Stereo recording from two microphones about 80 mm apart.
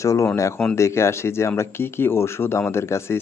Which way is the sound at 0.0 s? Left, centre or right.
Left.